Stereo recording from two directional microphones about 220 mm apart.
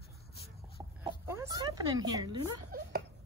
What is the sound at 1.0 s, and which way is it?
Oink, 15° right (ahead or behind).